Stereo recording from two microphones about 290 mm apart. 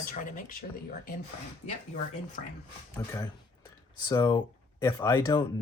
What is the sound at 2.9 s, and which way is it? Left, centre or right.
Speech, centre.